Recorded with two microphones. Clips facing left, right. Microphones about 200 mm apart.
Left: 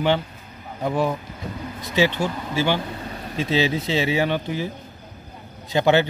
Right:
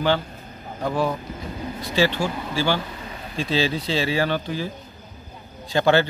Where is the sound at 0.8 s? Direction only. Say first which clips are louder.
Left 1 dB; 20° left (ahead or behind).